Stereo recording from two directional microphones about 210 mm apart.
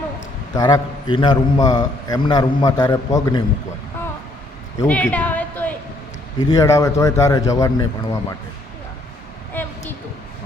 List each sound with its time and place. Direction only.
0.5 s a man's voice: 20° left (ahead or behind)
4.9 s a sound: 5° left (ahead or behind)
6.4 s a man's voice: 15° left (ahead or behind)